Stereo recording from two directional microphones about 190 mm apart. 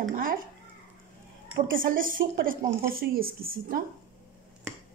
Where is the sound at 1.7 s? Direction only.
45° right (ahead or behind).